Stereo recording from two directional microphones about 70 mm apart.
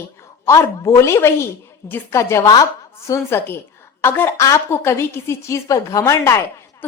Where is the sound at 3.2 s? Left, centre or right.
Left.